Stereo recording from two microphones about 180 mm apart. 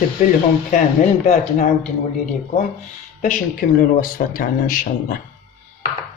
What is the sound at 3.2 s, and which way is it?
A man's voice, 50° left (ahead or behind).